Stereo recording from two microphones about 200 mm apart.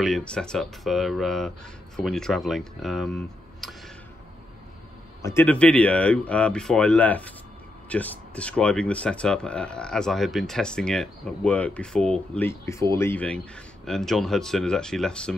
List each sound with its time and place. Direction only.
0.0 s speech: 5° left (ahead or behind)
5.2 s speech: 10° left (ahead or behind)